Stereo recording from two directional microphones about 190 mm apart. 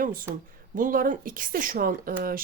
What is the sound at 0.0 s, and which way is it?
Speech, 50° right (ahead or behind).